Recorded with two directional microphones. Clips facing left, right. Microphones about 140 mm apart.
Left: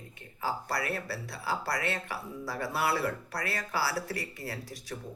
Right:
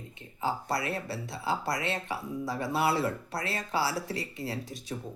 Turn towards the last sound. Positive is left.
turn(degrees=-20)  # may be behind; listen again after turning